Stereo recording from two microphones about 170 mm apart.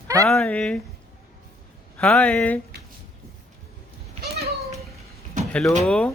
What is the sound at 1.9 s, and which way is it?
Speech, 5° left (ahead or behind).